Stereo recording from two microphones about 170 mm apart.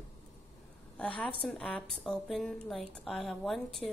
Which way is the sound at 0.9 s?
5° left (ahead or behind).